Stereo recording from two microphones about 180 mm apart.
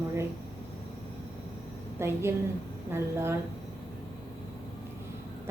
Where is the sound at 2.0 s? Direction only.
15° right (ahead or behind).